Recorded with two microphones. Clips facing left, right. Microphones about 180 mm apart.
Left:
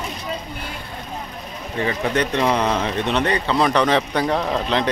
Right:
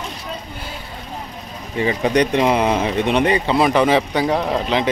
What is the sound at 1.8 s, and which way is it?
Speech, 15° right (ahead or behind).